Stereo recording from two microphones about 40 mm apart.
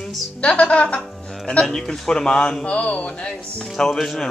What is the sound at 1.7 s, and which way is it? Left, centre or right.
Speech, centre.